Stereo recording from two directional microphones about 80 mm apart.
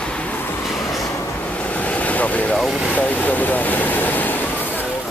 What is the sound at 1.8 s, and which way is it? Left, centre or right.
Vehicle, centre.